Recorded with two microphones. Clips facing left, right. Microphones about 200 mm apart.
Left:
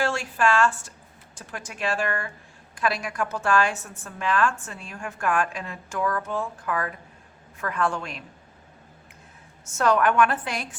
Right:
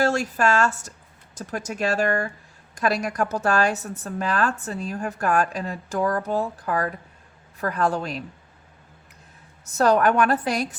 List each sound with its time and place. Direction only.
0.0 s a woman's voice: 40° right (ahead or behind)
9.6 s a woman's voice: 35° right (ahead or behind)